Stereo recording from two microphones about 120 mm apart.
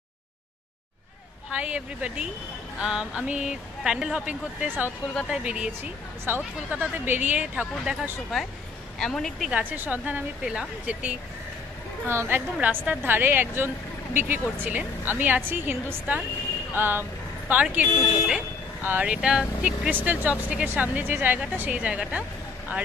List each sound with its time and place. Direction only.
1.5 s speech: 10° right (ahead or behind)
9.5 s speech: 15° right (ahead or behind)